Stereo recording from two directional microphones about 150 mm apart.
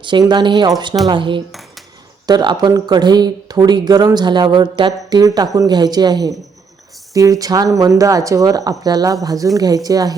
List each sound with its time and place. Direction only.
0.0 s speech: 30° right (ahead or behind)